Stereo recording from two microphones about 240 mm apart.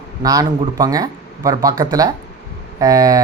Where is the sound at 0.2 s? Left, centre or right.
Centre.